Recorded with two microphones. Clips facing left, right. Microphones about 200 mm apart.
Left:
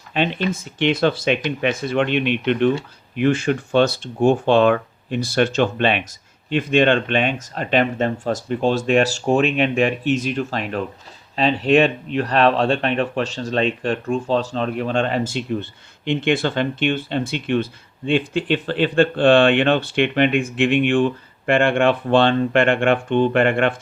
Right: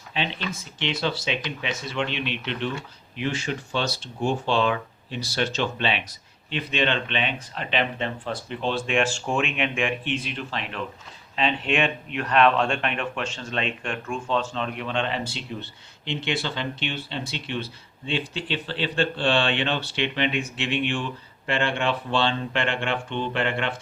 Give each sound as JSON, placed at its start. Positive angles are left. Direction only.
{"t": 0.1, "sound": "speech", "side_deg": 50}